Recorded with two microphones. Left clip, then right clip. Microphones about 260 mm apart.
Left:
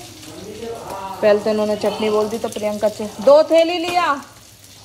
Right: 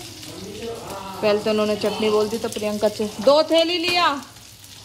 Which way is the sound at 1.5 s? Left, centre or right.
Right.